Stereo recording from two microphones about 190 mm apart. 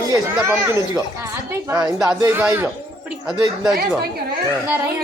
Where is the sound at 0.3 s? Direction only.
15° right (ahead or behind).